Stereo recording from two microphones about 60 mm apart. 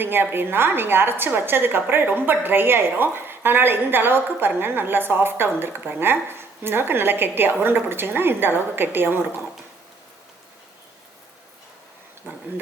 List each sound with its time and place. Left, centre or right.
0.0 s a woman's voice: right